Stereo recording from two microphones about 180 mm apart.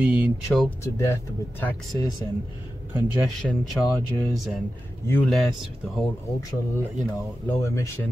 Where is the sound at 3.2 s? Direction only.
Centre (ahead or behind).